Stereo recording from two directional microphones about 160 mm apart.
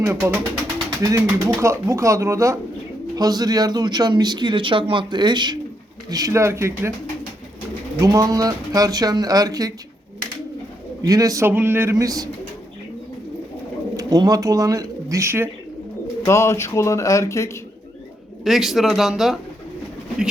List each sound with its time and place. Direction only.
0.0 s speech: 10° right (ahead or behind)
7.9 s speech: 20° right (ahead or behind)
11.0 s speech: 20° right (ahead or behind)
13.9 s speech: 20° right (ahead or behind)
16.2 s speech: 15° left (ahead or behind)
18.4 s speech: centre (ahead or behind)